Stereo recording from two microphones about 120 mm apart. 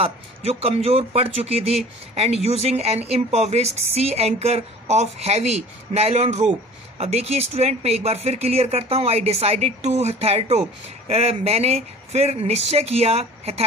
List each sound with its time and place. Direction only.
0.0 s speech: 55° right (ahead or behind)